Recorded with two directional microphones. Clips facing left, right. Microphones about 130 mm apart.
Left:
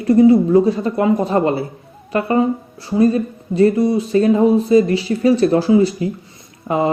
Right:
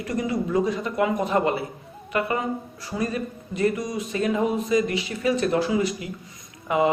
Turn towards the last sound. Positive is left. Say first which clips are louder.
# left 4 dB
turn(degrees=35)  # may be behind; listen again after turning